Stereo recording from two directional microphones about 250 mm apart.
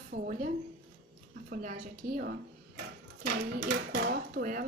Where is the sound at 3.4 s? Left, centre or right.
Right.